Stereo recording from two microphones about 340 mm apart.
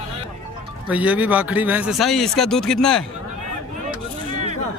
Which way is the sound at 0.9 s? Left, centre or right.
Centre.